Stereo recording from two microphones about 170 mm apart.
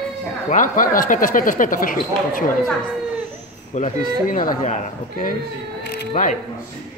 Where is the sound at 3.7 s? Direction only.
45° left (ahead or behind).